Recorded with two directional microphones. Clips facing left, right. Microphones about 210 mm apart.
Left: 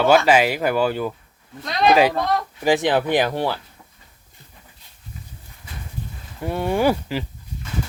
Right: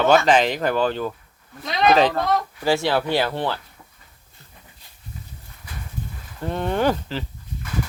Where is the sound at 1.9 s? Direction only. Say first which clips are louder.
Left 1 dB; 10° left (ahead or behind).